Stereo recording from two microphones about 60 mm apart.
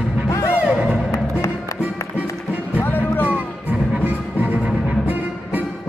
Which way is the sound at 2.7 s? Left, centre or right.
Left.